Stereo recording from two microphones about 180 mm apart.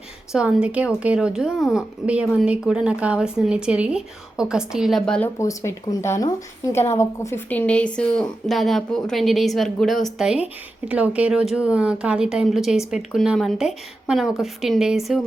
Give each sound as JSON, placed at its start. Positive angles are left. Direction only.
{"t": 0.3, "sound": "a woman's voice", "side_deg": -5}
{"t": 5.4, "sound": "a woman's voice", "side_deg": 20}